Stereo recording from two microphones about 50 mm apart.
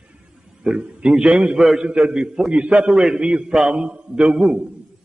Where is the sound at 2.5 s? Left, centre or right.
Right.